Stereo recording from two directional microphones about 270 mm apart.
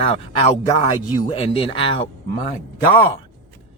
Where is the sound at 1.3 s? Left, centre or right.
Left.